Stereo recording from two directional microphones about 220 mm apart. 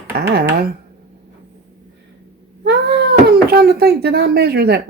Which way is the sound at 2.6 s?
50° right (ahead or behind).